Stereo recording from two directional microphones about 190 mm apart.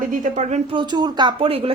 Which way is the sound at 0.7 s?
25° right (ahead or behind).